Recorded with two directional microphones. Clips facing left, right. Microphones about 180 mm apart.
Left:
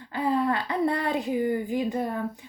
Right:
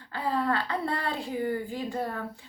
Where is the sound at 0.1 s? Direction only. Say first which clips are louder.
Left 3 dB; 20° left (ahead or behind).